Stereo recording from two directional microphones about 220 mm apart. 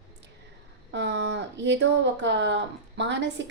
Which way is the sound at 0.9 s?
55° right (ahead or behind).